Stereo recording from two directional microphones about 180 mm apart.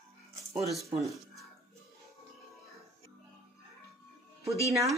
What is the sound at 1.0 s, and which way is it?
Speech, centre (ahead or behind).